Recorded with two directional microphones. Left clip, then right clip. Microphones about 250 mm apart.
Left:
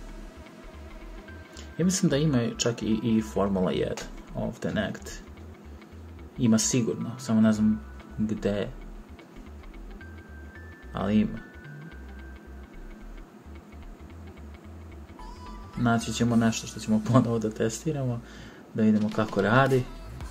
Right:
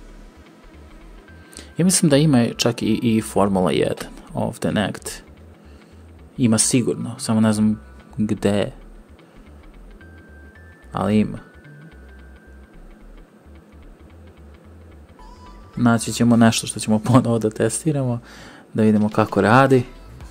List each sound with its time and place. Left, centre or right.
1.6 s speech: right
6.3 s speech: right
10.9 s speech: right
15.8 s speech: right